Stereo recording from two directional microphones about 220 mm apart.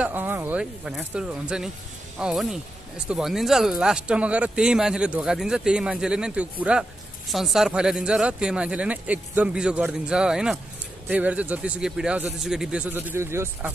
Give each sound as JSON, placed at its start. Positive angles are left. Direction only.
{"t": 0.0, "sound": "speech", "side_deg": -10}